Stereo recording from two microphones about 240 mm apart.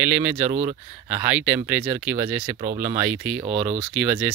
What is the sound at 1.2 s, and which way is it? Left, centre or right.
Speech, centre.